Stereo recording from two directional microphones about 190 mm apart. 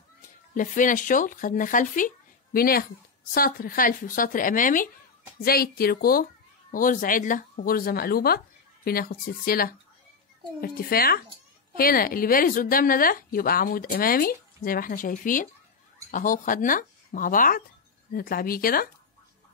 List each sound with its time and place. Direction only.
0.6 s a woman's voice: 45° left (ahead or behind)